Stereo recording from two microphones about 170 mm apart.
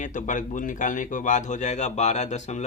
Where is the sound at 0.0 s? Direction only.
50° left (ahead or behind).